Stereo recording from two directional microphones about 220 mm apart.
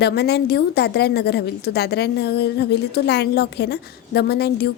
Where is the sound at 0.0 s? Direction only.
45° left (ahead or behind).